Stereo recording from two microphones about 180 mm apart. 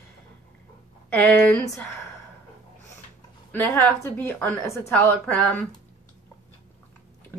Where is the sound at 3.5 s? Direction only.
15° left (ahead or behind).